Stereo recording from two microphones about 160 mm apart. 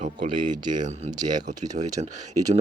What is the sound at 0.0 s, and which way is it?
Speech, 50° right (ahead or behind).